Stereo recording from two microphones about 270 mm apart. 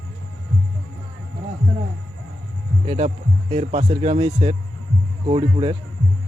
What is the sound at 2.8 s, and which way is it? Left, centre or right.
A man's voice, right.